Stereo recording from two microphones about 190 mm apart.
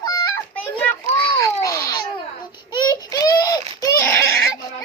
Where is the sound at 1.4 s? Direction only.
15° left (ahead or behind).